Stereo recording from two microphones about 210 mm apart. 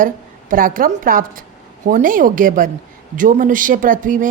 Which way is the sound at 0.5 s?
40° right (ahead or behind).